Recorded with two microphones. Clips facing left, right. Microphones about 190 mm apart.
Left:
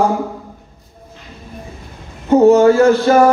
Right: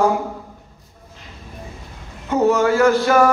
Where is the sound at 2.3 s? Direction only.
30° left (ahead or behind).